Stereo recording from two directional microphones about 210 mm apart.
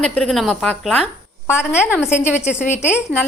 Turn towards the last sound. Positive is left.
turn(degrees=10)  # may be behind; listen again after turning